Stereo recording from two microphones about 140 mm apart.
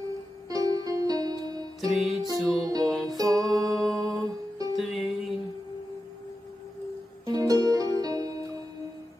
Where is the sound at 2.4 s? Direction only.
25° right (ahead or behind).